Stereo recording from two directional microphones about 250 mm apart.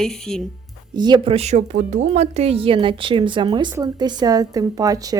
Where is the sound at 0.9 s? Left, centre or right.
Centre.